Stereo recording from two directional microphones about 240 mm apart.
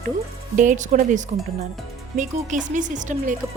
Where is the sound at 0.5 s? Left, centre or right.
Right.